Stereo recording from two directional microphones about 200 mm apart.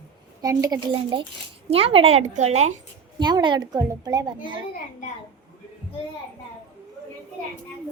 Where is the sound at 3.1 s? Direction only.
20° right (ahead or behind).